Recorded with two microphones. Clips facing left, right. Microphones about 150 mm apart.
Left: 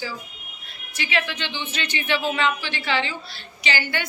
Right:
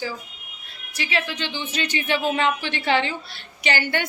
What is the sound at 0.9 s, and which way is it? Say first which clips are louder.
Speech: even; 35° right (ahead or behind).